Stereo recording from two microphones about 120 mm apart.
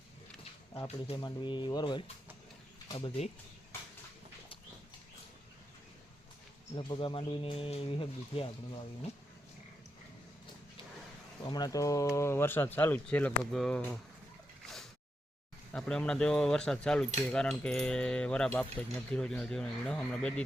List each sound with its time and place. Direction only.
1.1 s speech: 40° left (ahead or behind)
6.7 s speech: 45° left (ahead or behind)
11.4 s speech: 35° left (ahead or behind)
12.1 s keys jangling: 25° left (ahead or behind)
13.5 s speech: 5° left (ahead or behind)
15.7 s speech: 5° left (ahead or behind)
17.2 s keys jangling: 5° left (ahead or behind)